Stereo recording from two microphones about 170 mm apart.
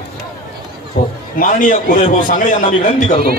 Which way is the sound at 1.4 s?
50° left (ahead or behind).